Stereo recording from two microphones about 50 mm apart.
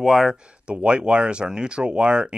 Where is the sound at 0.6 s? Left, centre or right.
Right.